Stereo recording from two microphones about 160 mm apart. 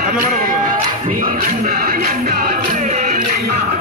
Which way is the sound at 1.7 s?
65° right (ahead or behind).